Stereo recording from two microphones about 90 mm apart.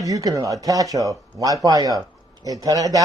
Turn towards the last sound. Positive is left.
turn(degrees=-40)  # may be behind; listen again after turning